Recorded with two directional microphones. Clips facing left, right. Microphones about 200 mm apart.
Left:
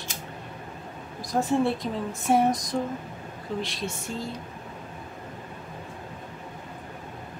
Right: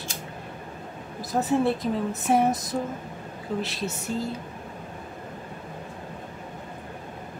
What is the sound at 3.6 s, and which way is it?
Speech, 5° right (ahead or behind).